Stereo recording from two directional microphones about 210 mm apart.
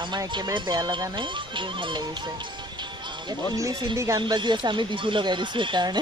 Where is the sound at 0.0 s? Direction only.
20° right (ahead or behind).